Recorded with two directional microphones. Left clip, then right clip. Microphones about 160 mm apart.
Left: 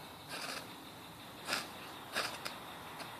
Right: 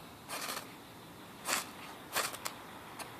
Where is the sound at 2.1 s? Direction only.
20° right (ahead or behind).